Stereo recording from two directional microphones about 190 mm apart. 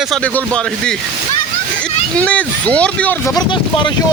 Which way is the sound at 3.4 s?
25° left (ahead or behind).